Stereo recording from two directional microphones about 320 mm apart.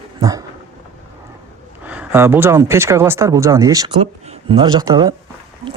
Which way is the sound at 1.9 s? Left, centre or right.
Centre.